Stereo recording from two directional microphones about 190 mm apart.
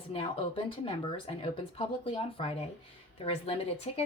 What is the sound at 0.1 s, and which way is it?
Speech, 30° left (ahead or behind).